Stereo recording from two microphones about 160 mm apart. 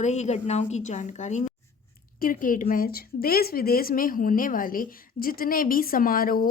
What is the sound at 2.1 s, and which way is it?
Speech, 60° left (ahead or behind).